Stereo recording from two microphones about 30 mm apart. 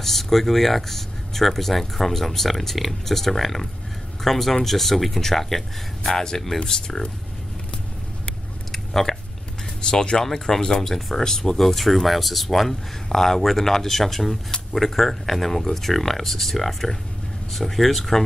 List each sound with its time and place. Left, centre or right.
0.0 s speech: centre
8.7 s a sound: centre
9.8 s speech: left
11.0 s speech: centre